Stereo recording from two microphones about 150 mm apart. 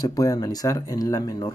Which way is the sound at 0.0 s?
25° left (ahead or behind).